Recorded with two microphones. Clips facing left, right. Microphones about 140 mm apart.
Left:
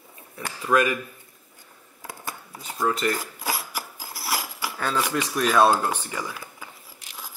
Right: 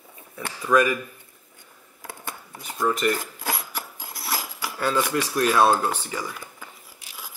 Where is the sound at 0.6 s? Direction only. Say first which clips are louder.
Right 2 dB; 10° left (ahead or behind).